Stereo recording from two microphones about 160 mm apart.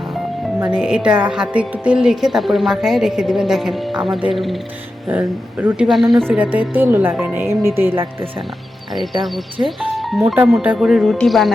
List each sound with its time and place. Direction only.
0.6 s speech: 5° right (ahead or behind)
5.0 s speech: 20° right (ahead or behind)
5.5 s speech: 5° right (ahead or behind)
9.6 s speech: centre (ahead or behind)